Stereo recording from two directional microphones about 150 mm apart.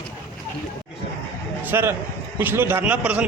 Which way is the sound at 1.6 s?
15° right (ahead or behind).